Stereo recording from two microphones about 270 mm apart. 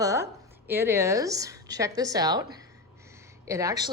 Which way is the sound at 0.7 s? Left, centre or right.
Centre.